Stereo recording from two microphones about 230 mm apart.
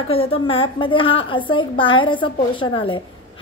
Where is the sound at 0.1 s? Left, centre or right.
Left.